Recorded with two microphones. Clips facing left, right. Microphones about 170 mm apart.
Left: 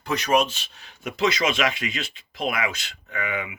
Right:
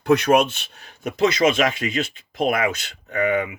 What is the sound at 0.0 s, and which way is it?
Speech, 55° right (ahead or behind).